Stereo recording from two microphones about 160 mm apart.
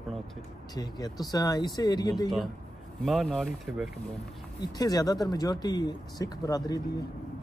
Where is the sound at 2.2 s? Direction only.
Centre (ahead or behind).